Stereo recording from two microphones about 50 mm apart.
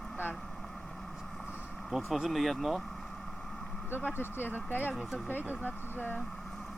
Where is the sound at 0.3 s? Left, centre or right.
Centre.